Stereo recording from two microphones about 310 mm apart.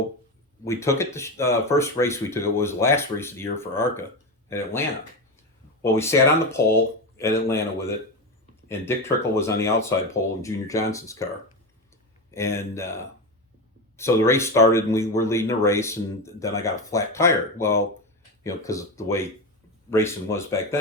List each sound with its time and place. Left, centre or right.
0.6 s speech: centre
12.5 s speech: centre